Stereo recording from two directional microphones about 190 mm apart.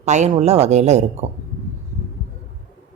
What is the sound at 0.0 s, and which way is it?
A woman's voice, 35° right (ahead or behind).